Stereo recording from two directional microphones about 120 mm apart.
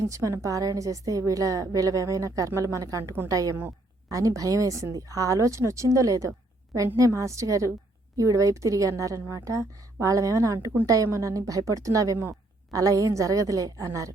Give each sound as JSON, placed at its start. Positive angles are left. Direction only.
{"t": 0.0, "sound": "a woman's voice", "side_deg": -25}